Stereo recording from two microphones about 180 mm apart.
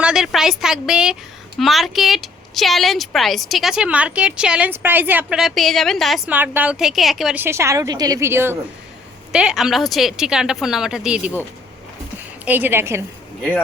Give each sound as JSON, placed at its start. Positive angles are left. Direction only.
{"t": 0.0, "sound": "a woman's voice", "side_deg": -5}
{"t": 12.5, "sound": "a woman's voice", "side_deg": -10}